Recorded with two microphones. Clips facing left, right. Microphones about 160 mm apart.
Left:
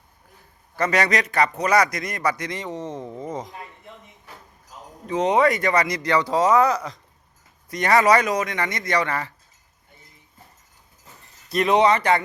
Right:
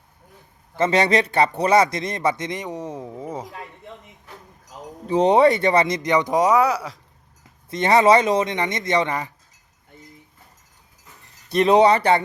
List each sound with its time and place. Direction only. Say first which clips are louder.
0.8 s a man's voice: right 3 dB; 25° right (ahead or behind); by 3.5 s 5° right (ahead or behind)
5.0 s a man's voice: right 4 dB; 35° right (ahead or behind); by 7.0 s 5° right (ahead or behind)
7.7 s a man's voice: right 2 dB; 25° right (ahead or behind)
11.5 s speech: right 3 dB; 30° right (ahead or behind)